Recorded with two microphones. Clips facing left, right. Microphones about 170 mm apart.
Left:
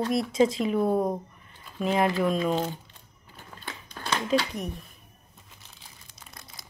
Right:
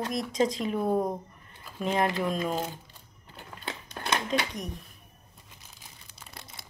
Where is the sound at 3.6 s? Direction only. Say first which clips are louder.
Right 2 dB; 20° right (ahead or behind).